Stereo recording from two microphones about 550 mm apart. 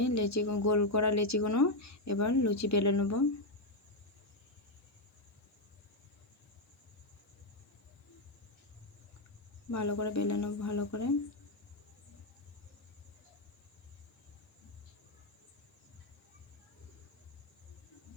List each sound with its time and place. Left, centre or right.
0.0 s speech: left
9.7 s speech: left